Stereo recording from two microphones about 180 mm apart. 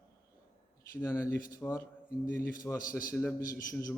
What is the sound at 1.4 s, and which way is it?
Speech, 50° left (ahead or behind).